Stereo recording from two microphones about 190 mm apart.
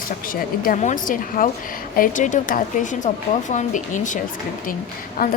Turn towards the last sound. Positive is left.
turn(degrees=50)  # may be behind; listen again after turning